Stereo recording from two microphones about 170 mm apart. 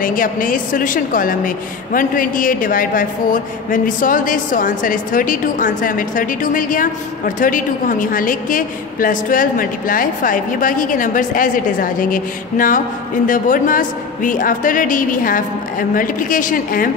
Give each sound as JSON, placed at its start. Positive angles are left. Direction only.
{"t": 0.0, "sound": "a woman's voice", "side_deg": 55}